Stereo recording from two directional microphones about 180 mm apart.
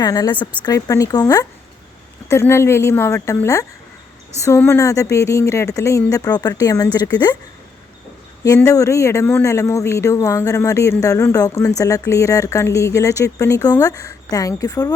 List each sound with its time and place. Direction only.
0.0 s speech: 20° left (ahead or behind)
8.5 s speech: 20° left (ahead or behind)